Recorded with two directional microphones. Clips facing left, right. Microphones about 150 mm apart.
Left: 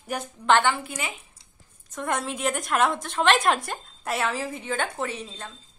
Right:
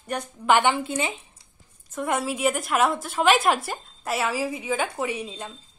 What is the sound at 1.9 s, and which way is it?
A woman's voice, 5° right (ahead or behind).